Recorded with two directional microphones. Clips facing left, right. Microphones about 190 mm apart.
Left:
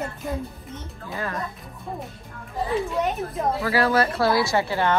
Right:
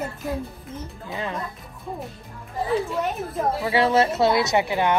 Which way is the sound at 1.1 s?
20° right (ahead or behind).